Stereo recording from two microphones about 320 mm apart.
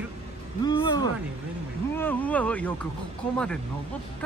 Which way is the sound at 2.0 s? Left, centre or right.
Centre.